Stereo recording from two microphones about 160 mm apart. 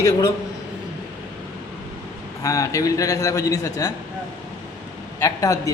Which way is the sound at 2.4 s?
20° left (ahead or behind).